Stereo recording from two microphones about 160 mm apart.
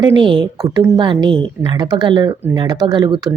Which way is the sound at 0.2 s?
30° right (ahead or behind).